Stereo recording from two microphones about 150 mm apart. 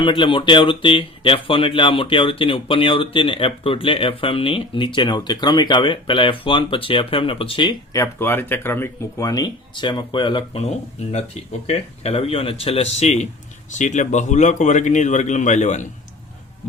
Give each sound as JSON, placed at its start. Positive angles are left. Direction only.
{"t": 0.0, "sound": "speech", "side_deg": 35}
{"t": 7.9, "sound": "speech", "side_deg": 15}